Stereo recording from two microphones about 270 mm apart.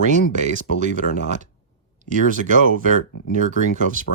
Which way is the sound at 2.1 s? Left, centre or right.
Right.